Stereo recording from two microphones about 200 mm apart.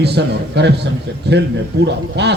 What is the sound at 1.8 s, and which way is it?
Speech, 60° right (ahead or behind).